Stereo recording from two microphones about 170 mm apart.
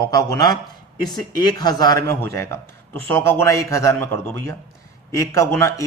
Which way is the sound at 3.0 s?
15° left (ahead or behind).